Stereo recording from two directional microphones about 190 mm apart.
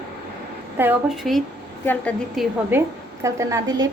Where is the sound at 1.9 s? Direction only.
5° left (ahead or behind).